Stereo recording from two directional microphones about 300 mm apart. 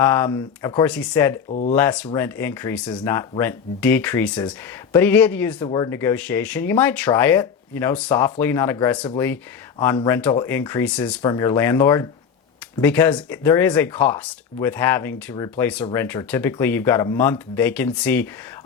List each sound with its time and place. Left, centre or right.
0.0 s speech: centre
1.5 s speech: left
1.7 s speech: centre